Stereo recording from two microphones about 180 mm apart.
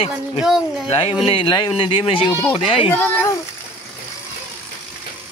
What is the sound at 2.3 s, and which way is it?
Speech, 15° left (ahead or behind).